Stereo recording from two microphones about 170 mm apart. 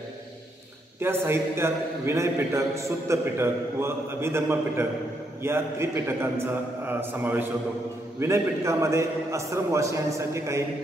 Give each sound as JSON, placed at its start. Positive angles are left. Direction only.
{"t": 0.9, "sound": "a man's voice", "side_deg": -15}